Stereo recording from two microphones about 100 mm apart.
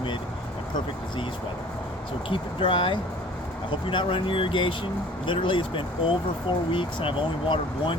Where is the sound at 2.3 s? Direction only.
55° left (ahead or behind).